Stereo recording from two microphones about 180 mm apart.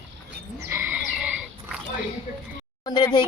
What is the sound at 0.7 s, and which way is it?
Bird, 10° right (ahead or behind).